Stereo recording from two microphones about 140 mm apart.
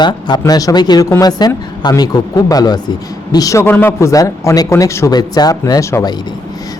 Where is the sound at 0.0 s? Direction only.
30° left (ahead or behind).